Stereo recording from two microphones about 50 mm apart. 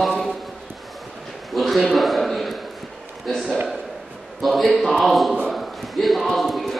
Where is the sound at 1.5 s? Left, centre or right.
Centre.